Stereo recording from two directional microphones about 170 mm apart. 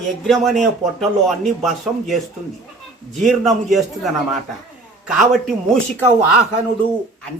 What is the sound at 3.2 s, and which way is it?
Speech, centre (ahead or behind).